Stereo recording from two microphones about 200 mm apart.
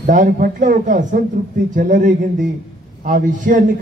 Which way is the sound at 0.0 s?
40° right (ahead or behind).